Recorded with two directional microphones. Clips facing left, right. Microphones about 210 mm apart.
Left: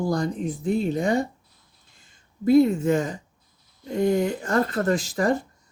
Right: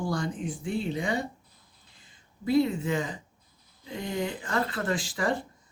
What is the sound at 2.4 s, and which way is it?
Speech, 45° left (ahead or behind).